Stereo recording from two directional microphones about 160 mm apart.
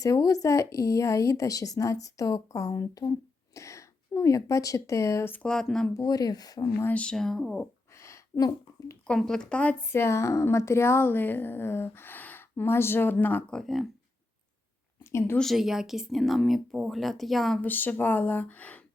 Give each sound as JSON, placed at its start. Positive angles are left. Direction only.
{"t": 0.0, "sound": "a woman's voice", "side_deg": 20}
{"t": 5.9, "sound": "a woman's voice", "side_deg": 25}
{"t": 6.7, "sound": "speech", "side_deg": 10}
{"t": 7.9, "sound": "a sound", "side_deg": 20}
{"t": 9.0, "sound": "a woman's voice", "side_deg": 5}
{"t": 15.4, "sound": "speech", "side_deg": 0}